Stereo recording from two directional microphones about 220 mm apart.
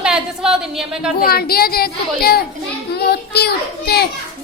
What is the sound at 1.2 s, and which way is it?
A child's voice, 45° left (ahead or behind).